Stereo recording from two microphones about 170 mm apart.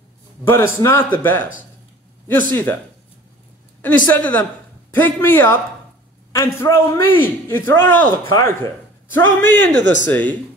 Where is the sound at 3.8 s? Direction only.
10° left (ahead or behind).